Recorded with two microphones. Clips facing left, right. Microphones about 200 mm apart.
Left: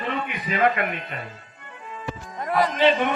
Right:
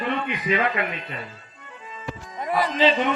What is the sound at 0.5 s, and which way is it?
Speech, 50° left (ahead or behind).